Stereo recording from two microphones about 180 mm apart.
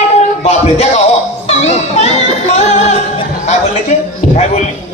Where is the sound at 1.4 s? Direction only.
35° left (ahead or behind).